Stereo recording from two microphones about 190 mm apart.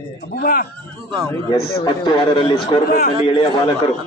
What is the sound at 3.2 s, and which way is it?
Speech, 30° left (ahead or behind).